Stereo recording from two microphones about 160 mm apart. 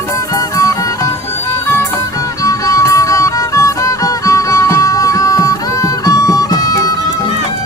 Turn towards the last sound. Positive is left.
turn(degrees=20)  # may be behind; listen again after turning